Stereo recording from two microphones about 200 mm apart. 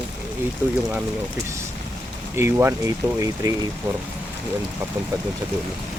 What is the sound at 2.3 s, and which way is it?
Speech, 10° right (ahead or behind).